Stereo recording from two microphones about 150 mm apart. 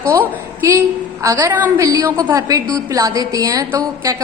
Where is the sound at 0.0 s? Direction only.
15° right (ahead or behind).